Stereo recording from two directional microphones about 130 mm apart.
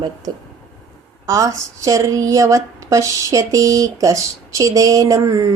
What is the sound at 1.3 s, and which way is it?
Speech, 25° right (ahead or behind).